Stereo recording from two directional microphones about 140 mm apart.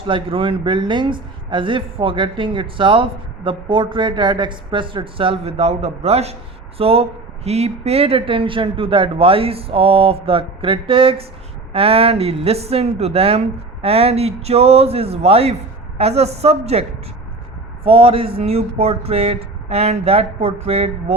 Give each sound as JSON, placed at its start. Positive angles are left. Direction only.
{"t": 0.1, "sound": "speech", "side_deg": -40}
{"t": 17.8, "sound": "speech", "side_deg": -40}